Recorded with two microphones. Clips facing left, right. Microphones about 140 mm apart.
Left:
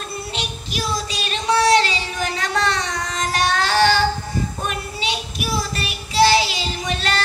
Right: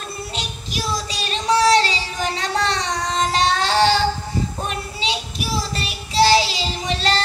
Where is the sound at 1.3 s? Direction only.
35° right (ahead or behind).